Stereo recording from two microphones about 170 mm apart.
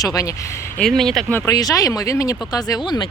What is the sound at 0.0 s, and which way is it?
Speech, 20° left (ahead or behind).